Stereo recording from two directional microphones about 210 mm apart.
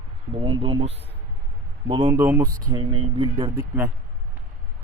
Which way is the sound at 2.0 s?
10° right (ahead or behind).